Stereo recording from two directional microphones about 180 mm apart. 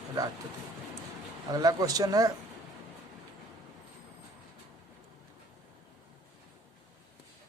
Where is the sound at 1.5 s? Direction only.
20° right (ahead or behind).